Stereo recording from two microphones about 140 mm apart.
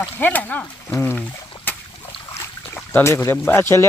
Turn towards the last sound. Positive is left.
turn(degrees=15)  # may be behind; listen again after turning